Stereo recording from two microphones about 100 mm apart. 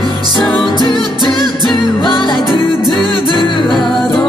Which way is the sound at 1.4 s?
Centre (ahead or behind).